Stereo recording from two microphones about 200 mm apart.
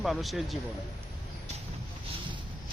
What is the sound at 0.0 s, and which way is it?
Speech, centre (ahead or behind).